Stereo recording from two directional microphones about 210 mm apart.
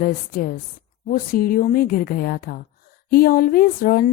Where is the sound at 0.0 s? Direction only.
45° left (ahead or behind).